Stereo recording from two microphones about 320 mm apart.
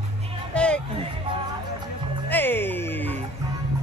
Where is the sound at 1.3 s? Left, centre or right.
Centre.